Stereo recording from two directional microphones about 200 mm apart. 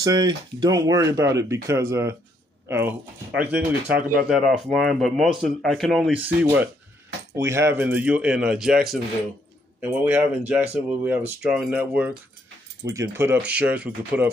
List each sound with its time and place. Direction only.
0.0 s speech: 20° right (ahead or behind)